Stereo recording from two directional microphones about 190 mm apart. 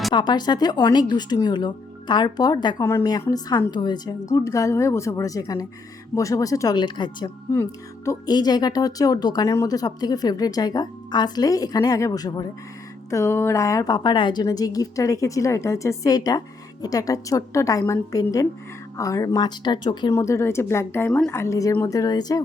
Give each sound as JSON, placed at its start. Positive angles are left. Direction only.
{"t": 0.1, "sound": "speech", "side_deg": 20}